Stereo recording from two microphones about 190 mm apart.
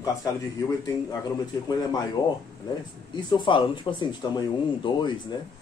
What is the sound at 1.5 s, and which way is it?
Speech, 20° left (ahead or behind).